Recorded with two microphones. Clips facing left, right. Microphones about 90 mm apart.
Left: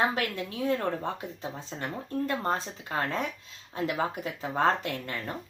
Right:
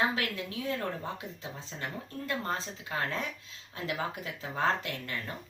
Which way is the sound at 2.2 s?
40° left (ahead or behind).